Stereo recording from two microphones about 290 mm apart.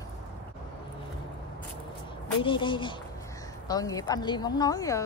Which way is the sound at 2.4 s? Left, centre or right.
Centre.